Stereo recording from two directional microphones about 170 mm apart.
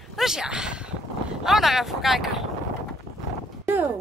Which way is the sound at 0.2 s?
5° right (ahead or behind).